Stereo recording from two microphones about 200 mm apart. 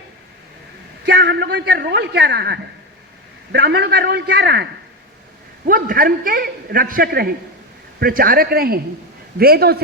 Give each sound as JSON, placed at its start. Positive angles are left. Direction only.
{"t": 1.0, "sound": "a man's voice", "side_deg": -60}
{"t": 5.6, "sound": "a man's voice", "side_deg": -45}